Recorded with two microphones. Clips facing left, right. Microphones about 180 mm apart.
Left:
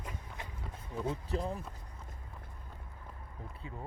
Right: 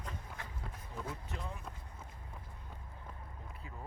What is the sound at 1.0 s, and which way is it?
Speech, 30° left (ahead or behind).